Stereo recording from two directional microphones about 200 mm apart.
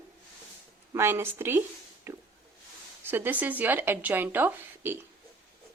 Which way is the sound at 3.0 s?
10° right (ahead or behind).